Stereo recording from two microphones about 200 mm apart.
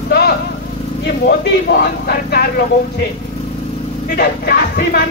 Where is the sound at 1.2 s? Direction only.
55° left (ahead or behind).